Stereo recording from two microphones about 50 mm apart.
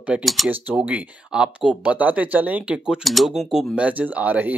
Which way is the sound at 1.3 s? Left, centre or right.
Centre.